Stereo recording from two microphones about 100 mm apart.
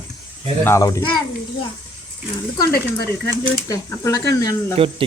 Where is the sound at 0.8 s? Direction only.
35° left (ahead or behind).